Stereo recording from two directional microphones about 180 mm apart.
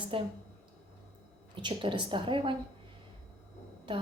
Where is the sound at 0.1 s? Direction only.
30° right (ahead or behind).